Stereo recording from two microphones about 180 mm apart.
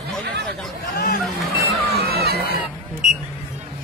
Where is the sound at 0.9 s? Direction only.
55° left (ahead or behind).